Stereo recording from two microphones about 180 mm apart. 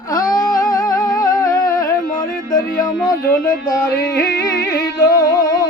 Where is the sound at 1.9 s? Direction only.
50° left (ahead or behind).